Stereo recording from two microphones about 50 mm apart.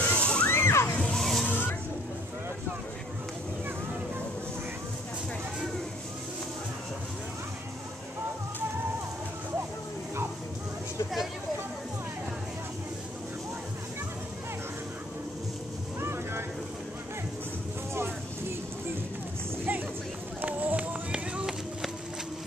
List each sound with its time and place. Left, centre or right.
0.0 s music: left
0.5 s splash: left
1.1 s slosh: centre
1.5 s a sound: left
16.0 s vehicle: right
20.4 s run: right